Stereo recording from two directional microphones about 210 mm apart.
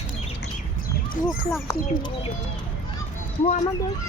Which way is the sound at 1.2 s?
40° left (ahead or behind).